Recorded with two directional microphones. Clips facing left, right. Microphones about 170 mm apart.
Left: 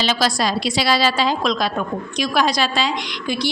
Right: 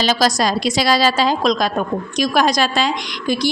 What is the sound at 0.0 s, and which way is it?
A woman's voice, 40° right (ahead or behind).